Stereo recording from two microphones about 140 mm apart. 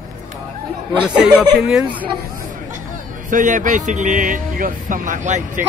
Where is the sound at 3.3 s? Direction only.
65° right (ahead or behind).